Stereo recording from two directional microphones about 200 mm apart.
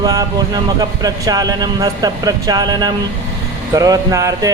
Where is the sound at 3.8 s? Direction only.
15° right (ahead or behind).